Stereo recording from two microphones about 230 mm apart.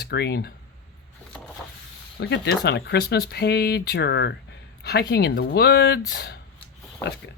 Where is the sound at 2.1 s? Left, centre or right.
Left.